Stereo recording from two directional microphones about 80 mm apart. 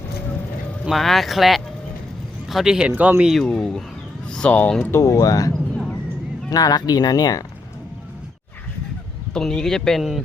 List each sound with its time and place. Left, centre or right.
0.9 s speech: centre
2.9 s speech: right
3.2 s speech: centre
4.8 s speech: left
5.7 s a sound: centre
6.5 s speech: left
9.3 s speech: centre